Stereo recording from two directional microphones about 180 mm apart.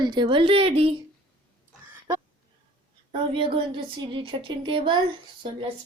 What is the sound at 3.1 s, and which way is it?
A woman's voice, 30° right (ahead or behind).